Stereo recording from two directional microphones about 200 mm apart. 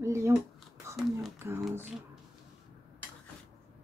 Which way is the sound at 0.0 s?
15° right (ahead or behind).